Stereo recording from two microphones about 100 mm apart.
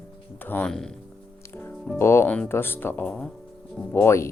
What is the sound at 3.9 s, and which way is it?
Speech, 25° left (ahead or behind).